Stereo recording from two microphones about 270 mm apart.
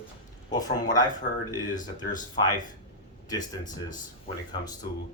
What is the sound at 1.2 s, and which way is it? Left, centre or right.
Speech, left.